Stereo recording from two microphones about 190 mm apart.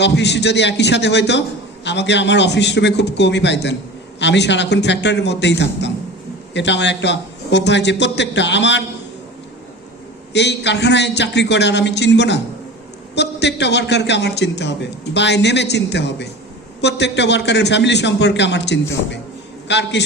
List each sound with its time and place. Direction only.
0.0 s a man's voice: 65° left (ahead or behind)
10.3 s a man's voice: 65° left (ahead or behind)